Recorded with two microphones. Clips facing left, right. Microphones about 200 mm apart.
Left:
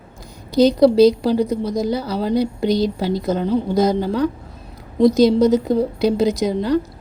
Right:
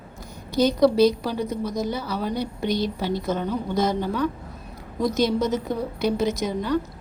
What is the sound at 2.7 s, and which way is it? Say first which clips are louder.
A woman's voice: left 4 dB; 35° left (ahead or behind).